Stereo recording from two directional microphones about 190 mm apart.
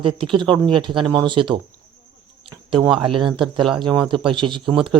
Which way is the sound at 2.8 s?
25° right (ahead or behind).